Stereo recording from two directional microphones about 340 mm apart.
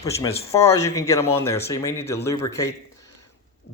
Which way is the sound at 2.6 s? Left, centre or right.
Centre.